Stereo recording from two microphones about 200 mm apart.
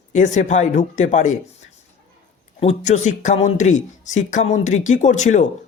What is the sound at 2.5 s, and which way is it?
Speech, 35° left (ahead or behind).